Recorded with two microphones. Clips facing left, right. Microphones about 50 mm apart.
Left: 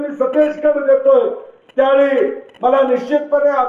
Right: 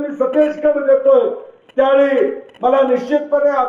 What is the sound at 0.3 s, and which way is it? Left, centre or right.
A man's voice, centre.